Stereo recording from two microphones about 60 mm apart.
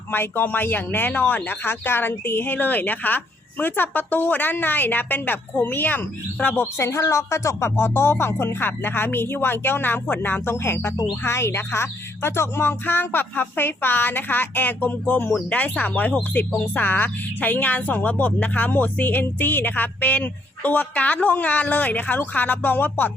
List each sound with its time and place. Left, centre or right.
0.1 s a woman's voice: left
6.7 s a woman's voice: left